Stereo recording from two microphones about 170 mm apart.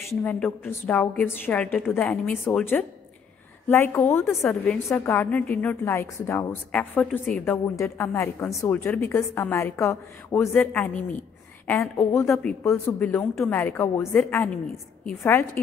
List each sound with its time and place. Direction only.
0.1 s a woman's voice: 10° left (ahead or behind)